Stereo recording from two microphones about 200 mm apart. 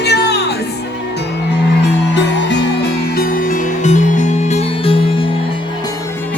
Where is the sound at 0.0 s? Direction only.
55° left (ahead or behind).